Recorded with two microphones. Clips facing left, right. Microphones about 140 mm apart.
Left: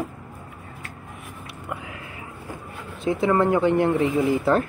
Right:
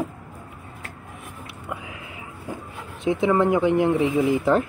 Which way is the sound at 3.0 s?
15° right (ahead or behind).